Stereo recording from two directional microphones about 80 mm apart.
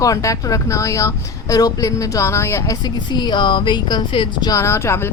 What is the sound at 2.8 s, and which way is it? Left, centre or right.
Speech, left.